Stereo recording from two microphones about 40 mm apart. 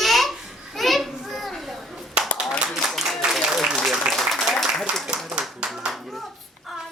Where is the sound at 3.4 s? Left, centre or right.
Centre.